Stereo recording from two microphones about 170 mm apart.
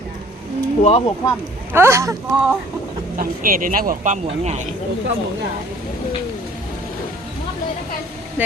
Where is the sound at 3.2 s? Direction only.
55° right (ahead or behind).